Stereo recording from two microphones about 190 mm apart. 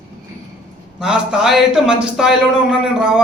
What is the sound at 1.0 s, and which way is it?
A man's voice, 5° right (ahead or behind).